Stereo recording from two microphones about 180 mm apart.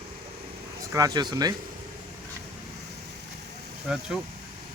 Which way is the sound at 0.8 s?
20° right (ahead or behind).